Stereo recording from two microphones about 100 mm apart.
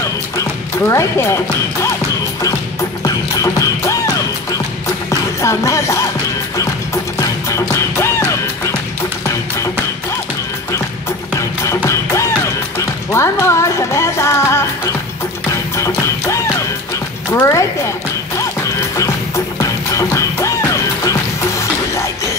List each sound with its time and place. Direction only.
0.4 s speech: 30° left (ahead or behind)
3.0 s music: 35° left (ahead or behind)
7.2 s music: 30° left (ahead or behind)
11.3 s music: 30° left (ahead or behind)
17.3 s a woman's voice: 30° left (ahead or behind)
18.7 s music: 30° left (ahead or behind)